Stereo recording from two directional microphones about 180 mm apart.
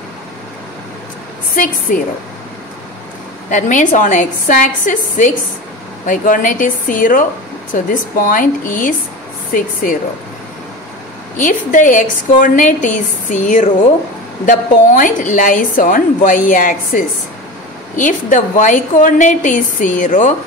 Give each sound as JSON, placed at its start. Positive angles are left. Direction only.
{"t": 1.5, "sound": "a woman's voice", "side_deg": 50}
{"t": 3.4, "sound": "a woman's voice", "side_deg": 45}
{"t": 11.3, "sound": "a woman's voice", "side_deg": 45}